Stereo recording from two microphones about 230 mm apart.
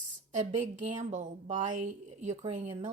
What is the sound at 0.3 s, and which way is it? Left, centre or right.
A woman's voice, right.